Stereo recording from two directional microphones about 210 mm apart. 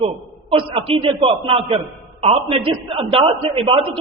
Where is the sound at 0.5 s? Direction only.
25° right (ahead or behind).